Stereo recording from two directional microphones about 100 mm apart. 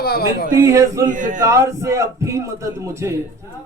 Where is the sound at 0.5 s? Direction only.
30° right (ahead or behind).